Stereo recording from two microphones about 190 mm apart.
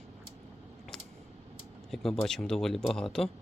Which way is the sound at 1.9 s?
5° left (ahead or behind).